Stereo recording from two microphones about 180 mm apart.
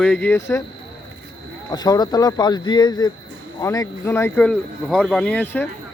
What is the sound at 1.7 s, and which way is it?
Speech, 20° left (ahead or behind).